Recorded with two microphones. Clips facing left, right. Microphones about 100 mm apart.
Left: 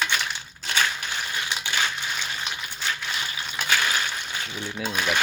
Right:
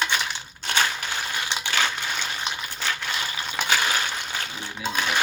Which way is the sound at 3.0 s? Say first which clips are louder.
Right 2 dB; 45° right (ahead or behind).